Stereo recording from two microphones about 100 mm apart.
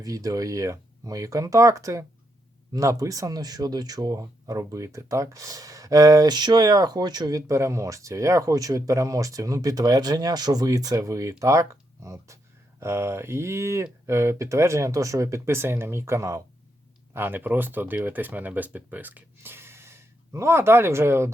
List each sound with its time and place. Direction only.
0.0 s speech: 35° right (ahead or behind)